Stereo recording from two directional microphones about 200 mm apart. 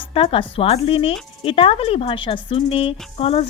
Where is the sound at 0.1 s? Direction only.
25° left (ahead or behind).